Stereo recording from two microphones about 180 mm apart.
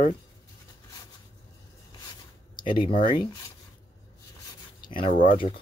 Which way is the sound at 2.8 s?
30° left (ahead or behind).